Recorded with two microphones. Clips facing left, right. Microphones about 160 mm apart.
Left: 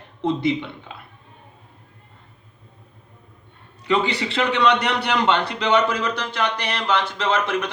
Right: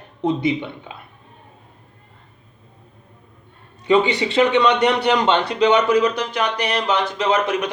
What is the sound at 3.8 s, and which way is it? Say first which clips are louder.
A man's voice: right 5 dB; 20° right (ahead or behind).